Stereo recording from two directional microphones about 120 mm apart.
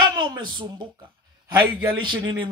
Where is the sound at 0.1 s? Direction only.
35° right (ahead or behind).